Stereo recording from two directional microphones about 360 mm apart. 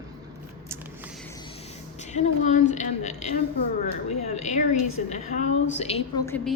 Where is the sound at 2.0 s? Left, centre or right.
Centre.